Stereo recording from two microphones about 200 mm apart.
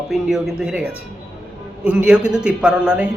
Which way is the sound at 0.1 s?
Centre (ahead or behind).